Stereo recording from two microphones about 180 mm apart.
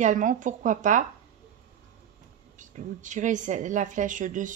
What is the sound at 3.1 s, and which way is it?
Speech, 45° right (ahead or behind).